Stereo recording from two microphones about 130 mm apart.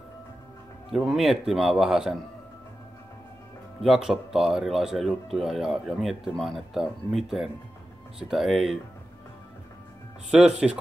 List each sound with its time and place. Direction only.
0.9 s speech: centre (ahead or behind)
3.8 s speech: centre (ahead or behind)
10.3 s speech: 5° right (ahead or behind)